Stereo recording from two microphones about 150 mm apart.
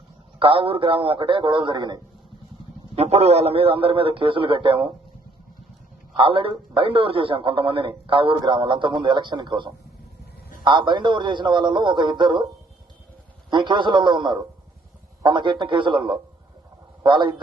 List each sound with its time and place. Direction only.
0.3 s a man's voice: 35° right (ahead or behind)
2.9 s a man's voice: 45° right (ahead or behind)
6.1 s a man's voice: 35° right (ahead or behind)
13.5 s a man's voice: 30° right (ahead or behind)